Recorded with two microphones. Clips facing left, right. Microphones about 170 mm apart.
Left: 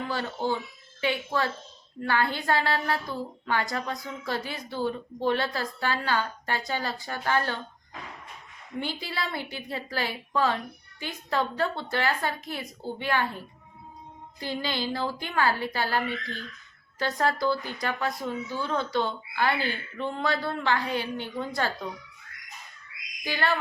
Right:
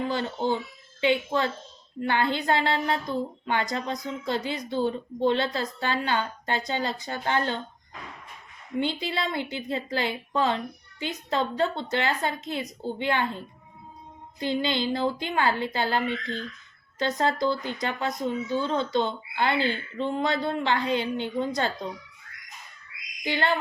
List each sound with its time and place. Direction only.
0.0 s speech: 20° right (ahead or behind)
8.8 s speech: 20° right (ahead or behind)
23.2 s speech: 20° right (ahead or behind)